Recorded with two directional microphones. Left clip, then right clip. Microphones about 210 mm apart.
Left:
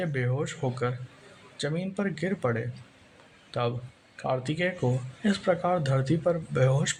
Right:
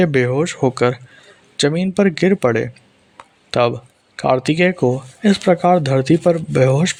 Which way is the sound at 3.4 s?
40° right (ahead or behind).